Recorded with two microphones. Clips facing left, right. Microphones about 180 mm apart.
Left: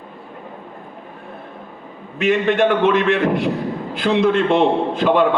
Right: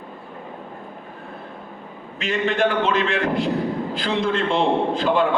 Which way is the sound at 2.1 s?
60° left (ahead or behind).